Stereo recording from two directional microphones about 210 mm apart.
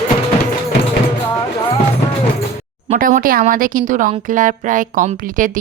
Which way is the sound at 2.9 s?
40° right (ahead or behind).